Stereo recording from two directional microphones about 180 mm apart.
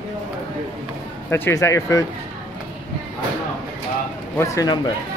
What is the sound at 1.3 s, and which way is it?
Speech, 15° left (ahead or behind).